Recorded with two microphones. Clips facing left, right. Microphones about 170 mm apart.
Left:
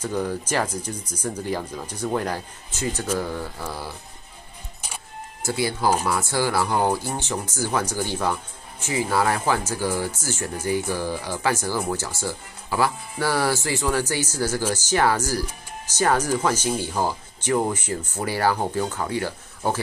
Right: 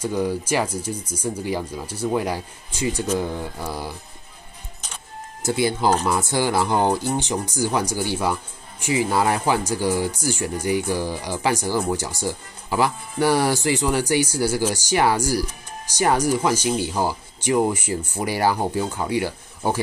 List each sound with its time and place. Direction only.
0.0 s speech: 10° right (ahead or behind)
5.4 s speech: 20° right (ahead or behind)